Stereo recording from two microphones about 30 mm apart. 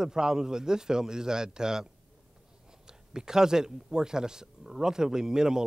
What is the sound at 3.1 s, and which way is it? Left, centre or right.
A man's voice, right.